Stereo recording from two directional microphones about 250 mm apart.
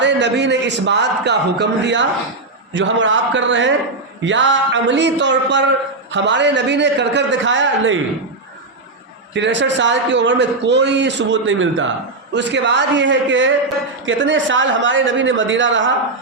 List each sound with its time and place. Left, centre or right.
0.0 s a man's voice: right
9.3 s a man's voice: right